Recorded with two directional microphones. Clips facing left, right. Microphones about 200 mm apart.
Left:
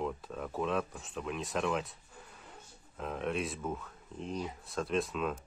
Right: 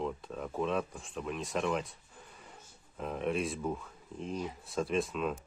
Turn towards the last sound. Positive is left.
turn(degrees=0)  # may be behind; listen again after turning